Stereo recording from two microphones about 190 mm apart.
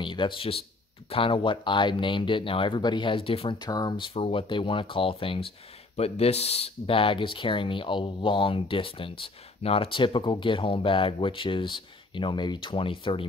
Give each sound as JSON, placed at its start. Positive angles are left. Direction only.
{"t": 0.0, "sound": "speech", "side_deg": 25}